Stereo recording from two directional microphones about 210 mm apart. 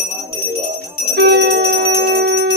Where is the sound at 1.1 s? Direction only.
55° right (ahead or behind).